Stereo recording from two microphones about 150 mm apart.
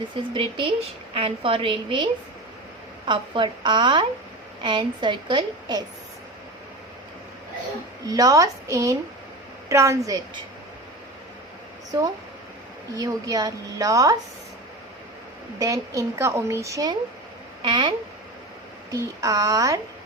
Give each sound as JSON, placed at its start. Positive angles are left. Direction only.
{"t": 0.1, "sound": "a woman's voice", "side_deg": -35}
{"t": 3.1, "sound": "a woman's voice", "side_deg": -30}
{"t": 8.0, "sound": "a woman's voice", "side_deg": -25}
{"t": 11.9, "sound": "a woman's voice", "side_deg": -25}
{"t": 15.5, "sound": "a woman's voice", "side_deg": -20}
{"t": 18.9, "sound": "a woman's voice", "side_deg": -20}